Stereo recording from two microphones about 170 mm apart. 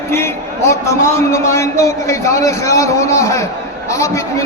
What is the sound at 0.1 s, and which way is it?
A man's voice, 15° left (ahead or behind).